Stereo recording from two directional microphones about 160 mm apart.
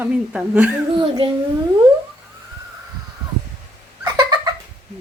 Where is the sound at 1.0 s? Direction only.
30° right (ahead or behind).